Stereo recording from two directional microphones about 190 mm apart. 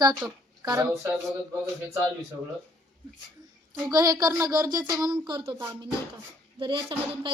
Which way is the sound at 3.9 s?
20° right (ahead or behind).